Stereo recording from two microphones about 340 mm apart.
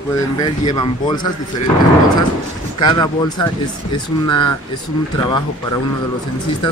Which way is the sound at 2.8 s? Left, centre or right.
Centre.